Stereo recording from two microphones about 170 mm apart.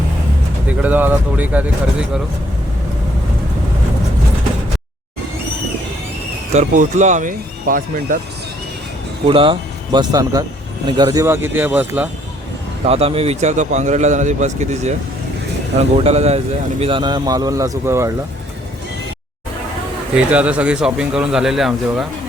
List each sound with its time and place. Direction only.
0.7 s speech: 10° right (ahead or behind)
6.5 s a man's voice: 45° right (ahead or behind)
9.2 s speech: 30° right (ahead or behind); by 12.0 s 10° right (ahead or behind)
12.8 s a man's voice: 35° right (ahead or behind)
16.8 s speech: 30° right (ahead or behind)
20.3 s speech: 10° right (ahead or behind)